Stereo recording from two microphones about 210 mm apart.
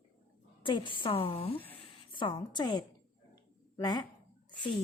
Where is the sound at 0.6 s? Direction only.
25° left (ahead or behind).